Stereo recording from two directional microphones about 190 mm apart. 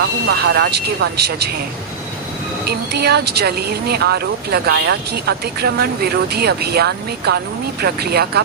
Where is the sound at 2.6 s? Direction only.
60° right (ahead or behind).